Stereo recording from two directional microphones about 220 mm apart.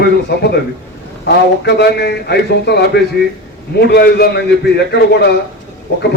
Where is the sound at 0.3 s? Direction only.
45° left (ahead or behind).